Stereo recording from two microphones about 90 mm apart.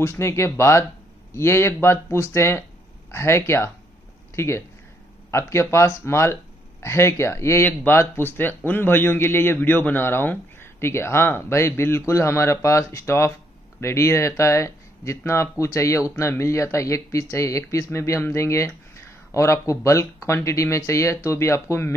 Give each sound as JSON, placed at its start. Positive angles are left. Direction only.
{"t": 0.0, "sound": "speech", "side_deg": 30}